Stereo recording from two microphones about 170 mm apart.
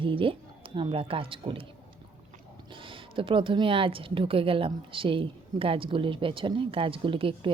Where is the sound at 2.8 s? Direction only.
30° right (ahead or behind).